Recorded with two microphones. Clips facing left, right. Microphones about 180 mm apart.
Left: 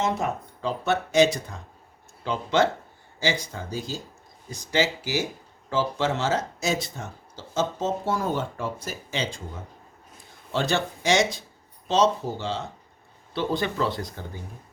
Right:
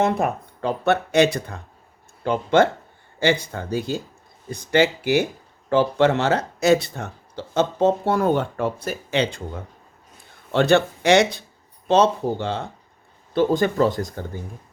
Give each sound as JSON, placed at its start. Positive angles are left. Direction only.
{"t": 0.0, "sound": "speech", "side_deg": -60}
{"t": 10.5, "sound": "speech", "side_deg": -60}
{"t": 13.3, "sound": "speech", "side_deg": -45}